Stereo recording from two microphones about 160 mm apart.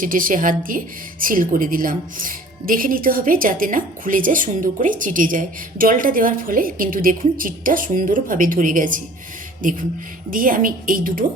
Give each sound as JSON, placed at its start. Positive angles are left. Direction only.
{"t": 0.0, "sound": "speech", "side_deg": -60}